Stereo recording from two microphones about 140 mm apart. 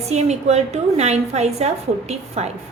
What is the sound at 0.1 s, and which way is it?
A woman's voice, 50° right (ahead or behind).